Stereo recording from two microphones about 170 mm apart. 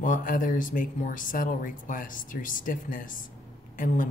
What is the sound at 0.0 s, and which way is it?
Speech, 50° left (ahead or behind).